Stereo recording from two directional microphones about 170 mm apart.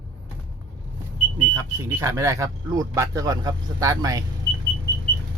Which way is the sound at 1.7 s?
20° right (ahead or behind).